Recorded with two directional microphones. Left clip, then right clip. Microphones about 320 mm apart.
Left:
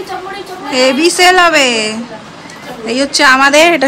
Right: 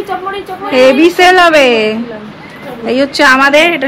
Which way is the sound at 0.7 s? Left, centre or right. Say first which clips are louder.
Right 4 dB; centre.